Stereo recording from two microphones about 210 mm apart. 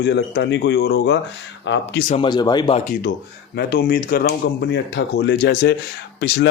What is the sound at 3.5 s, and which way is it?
Speech, 50° left (ahead or behind).